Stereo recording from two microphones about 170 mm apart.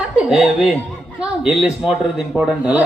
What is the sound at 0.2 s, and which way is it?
Speech, 5° right (ahead or behind).